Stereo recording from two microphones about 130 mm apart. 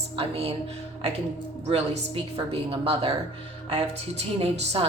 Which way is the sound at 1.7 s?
50° right (ahead or behind).